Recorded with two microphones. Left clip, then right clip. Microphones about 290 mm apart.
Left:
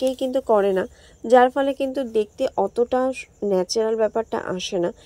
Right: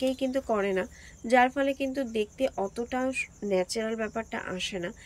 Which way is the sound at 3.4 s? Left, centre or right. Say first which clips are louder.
Left 8 dB; left.